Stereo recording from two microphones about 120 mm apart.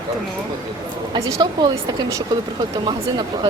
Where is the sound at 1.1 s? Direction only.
25° right (ahead or behind).